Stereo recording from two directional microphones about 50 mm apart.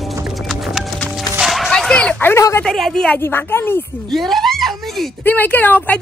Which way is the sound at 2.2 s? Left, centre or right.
Left.